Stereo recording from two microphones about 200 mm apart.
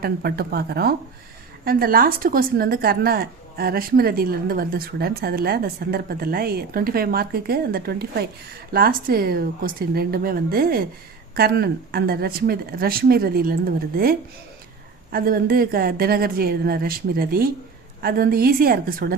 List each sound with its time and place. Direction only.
0.0 s speech: 50° right (ahead or behind)